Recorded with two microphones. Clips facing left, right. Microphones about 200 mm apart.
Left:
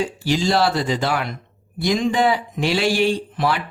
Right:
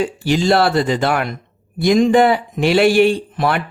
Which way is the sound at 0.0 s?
55° right (ahead or behind).